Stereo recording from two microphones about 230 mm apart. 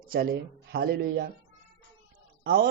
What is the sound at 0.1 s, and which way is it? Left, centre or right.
A man's voice, right.